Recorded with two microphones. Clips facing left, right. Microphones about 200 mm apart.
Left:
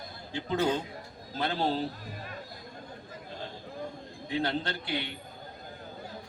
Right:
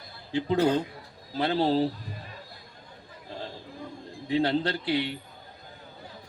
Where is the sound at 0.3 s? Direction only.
35° right (ahead or behind).